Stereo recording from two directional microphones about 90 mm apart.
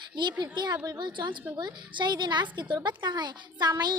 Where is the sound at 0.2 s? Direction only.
60° right (ahead or behind).